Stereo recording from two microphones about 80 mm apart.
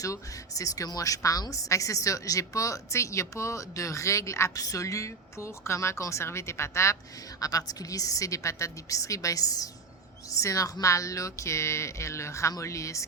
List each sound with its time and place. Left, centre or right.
0.0 s a woman's voice: left
7.3 s a woman's voice: left